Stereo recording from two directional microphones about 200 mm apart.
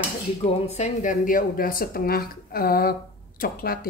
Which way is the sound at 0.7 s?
35° left (ahead or behind).